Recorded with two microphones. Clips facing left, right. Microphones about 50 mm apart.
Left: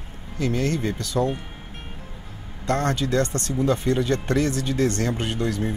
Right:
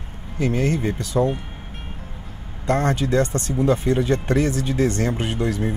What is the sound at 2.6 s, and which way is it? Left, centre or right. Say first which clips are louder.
Speech: right 3 dB; right.